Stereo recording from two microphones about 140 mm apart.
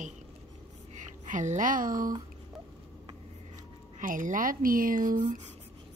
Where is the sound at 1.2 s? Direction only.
60° right (ahead or behind).